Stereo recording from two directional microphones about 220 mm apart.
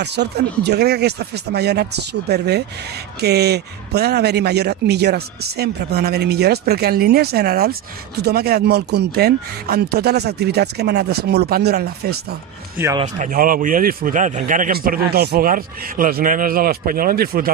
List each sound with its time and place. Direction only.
0.0 s a man's voice: 50° right (ahead or behind)
12.7 s speech: 15° right (ahead or behind)
13.0 s speech: 35° right (ahead or behind)